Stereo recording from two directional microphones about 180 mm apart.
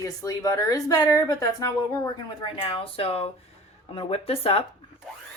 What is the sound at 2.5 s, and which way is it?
Speech, 30° left (ahead or behind).